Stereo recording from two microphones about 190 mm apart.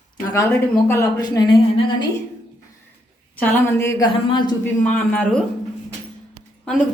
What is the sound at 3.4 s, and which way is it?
A woman's voice, 15° left (ahead or behind).